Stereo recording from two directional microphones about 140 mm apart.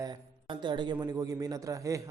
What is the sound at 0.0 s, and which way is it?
A man's voice, 35° right (ahead or behind).